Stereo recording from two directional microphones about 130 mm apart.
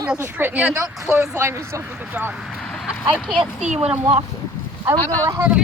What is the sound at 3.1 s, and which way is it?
Speech, centre (ahead or behind).